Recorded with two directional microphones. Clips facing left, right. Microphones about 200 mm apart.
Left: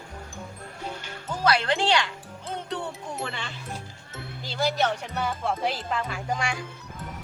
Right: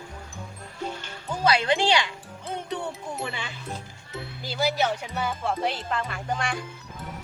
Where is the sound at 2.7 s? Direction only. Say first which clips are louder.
Right 1 dB; 5° right (ahead or behind).